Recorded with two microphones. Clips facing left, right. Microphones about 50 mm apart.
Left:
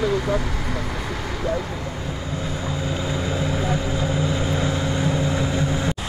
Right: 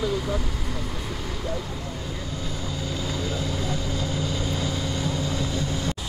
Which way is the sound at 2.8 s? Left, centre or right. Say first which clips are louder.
Left 3 dB; left.